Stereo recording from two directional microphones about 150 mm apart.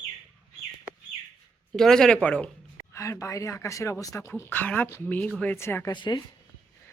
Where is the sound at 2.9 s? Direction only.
20° left (ahead or behind).